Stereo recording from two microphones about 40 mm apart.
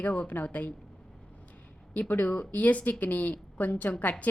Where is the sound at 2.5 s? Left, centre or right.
Left.